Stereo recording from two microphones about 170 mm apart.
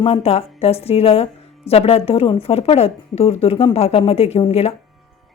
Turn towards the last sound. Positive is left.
turn(degrees=35)  # may be behind; listen again after turning